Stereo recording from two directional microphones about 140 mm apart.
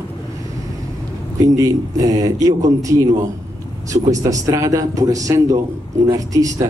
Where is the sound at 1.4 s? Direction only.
25° right (ahead or behind).